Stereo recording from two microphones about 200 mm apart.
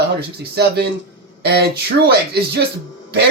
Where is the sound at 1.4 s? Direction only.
55° right (ahead or behind).